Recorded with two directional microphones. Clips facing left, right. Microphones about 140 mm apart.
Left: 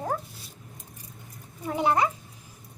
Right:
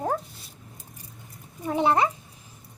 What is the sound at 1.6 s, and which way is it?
Speech, 25° right (ahead or behind).